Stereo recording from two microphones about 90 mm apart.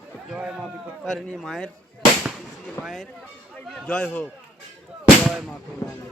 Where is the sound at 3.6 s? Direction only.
15° left (ahead or behind).